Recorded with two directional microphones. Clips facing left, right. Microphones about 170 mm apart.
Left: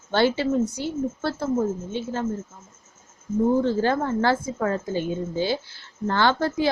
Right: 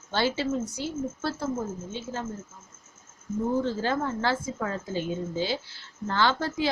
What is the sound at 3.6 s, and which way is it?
A woman's voice, 55° left (ahead or behind).